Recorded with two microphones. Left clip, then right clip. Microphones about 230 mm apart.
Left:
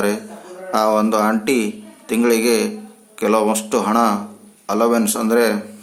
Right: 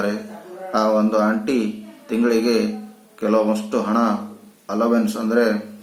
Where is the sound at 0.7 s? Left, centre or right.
Left.